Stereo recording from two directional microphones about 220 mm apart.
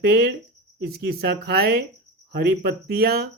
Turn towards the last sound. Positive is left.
turn(degrees=-45)  # may be behind; listen again after turning